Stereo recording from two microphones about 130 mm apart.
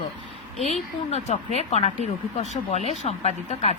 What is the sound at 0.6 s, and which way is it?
Speech, 60° left (ahead or behind).